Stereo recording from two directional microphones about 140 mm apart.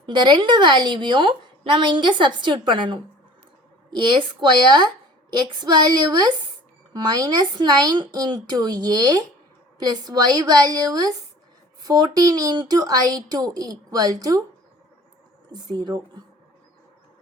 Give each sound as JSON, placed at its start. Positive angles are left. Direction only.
{"t": 0.0, "sound": "a woman's voice", "side_deg": -35}
{"t": 15.7, "sound": "a woman's voice", "side_deg": -35}